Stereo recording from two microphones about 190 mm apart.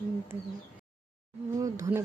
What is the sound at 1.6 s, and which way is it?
Speech, 15° right (ahead or behind).